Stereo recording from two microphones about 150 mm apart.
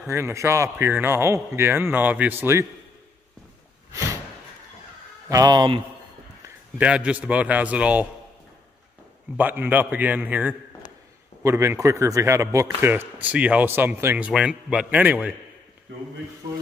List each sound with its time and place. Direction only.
0.1 s a man's voice: 20° right (ahead or behind)
5.3 s speech: 25° right (ahead or behind)
6.8 s a man's voice: 10° right (ahead or behind)
9.4 s a man's voice: 10° right (ahead or behind)